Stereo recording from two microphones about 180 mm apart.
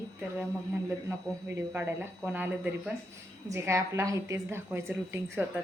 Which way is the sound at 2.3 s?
10° right (ahead or behind).